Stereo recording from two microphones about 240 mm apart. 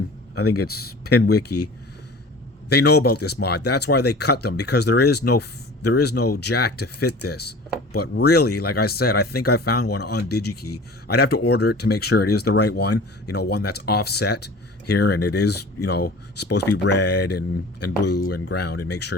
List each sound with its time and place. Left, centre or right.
0.3 s speech: left
1.2 s speech: left
1.5 s speech: left
2.6 s speech: left